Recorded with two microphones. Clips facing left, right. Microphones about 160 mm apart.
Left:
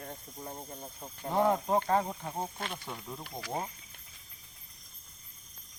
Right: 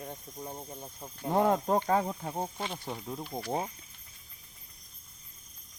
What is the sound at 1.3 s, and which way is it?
Speech, 50° right (ahead or behind).